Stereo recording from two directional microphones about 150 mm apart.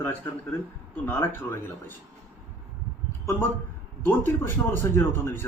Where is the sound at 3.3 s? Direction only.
15° left (ahead or behind).